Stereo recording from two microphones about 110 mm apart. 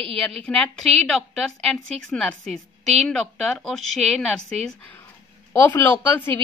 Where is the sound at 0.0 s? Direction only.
10° left (ahead or behind).